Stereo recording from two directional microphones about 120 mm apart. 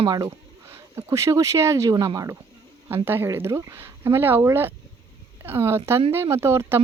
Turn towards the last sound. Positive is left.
turn(degrees=-20)  # may be behind; listen again after turning